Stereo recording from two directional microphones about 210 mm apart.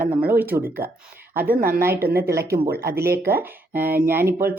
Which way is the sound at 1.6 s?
45° right (ahead or behind).